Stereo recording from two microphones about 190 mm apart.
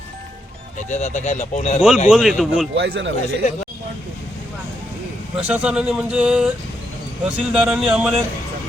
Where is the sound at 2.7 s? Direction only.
65° right (ahead or behind).